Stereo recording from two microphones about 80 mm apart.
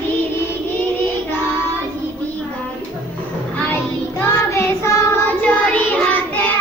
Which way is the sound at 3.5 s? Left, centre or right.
Centre.